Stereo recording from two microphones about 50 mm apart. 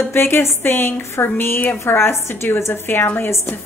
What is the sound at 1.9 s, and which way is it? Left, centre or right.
A woman's voice, left.